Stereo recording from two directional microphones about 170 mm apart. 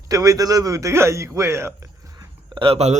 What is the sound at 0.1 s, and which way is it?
A man's voice, 20° right (ahead or behind).